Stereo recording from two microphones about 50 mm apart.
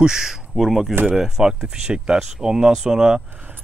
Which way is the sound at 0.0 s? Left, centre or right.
Centre.